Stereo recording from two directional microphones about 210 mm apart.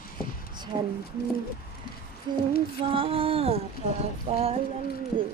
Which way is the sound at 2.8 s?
25° right (ahead or behind).